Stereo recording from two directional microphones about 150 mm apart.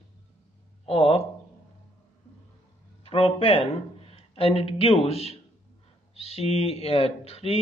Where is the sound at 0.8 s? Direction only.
40° left (ahead or behind).